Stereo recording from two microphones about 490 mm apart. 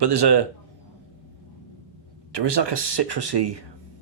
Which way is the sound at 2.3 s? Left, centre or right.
Right.